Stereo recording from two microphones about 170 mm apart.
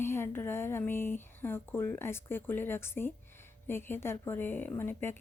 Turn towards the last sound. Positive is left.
turn(degrees=15)  # may be behind; listen again after turning